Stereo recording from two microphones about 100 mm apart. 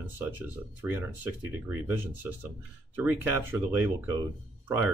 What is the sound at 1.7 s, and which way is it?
Speech, 20° right (ahead or behind).